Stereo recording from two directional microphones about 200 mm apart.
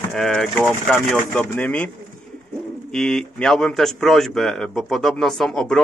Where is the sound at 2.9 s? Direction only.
5° left (ahead or behind).